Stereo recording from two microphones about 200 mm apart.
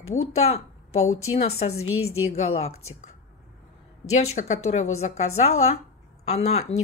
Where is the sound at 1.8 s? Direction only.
90° left.